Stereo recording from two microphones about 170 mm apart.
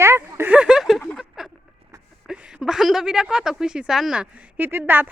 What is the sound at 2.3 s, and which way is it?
A woman's voice, 5° right (ahead or behind).